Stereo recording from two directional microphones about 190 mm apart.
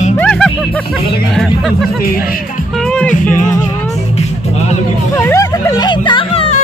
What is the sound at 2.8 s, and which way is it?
Music, 5° left (ahead or behind).